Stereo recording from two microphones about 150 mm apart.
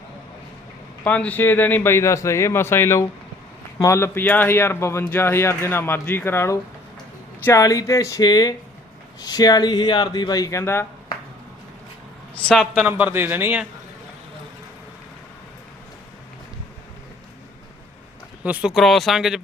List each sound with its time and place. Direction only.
1.0 s speech: 10° left (ahead or behind)
12.3 s speech: 5° left (ahead or behind)
12.8 s a man's voice: 10° right (ahead or behind)
18.4 s speech: 10° right (ahead or behind)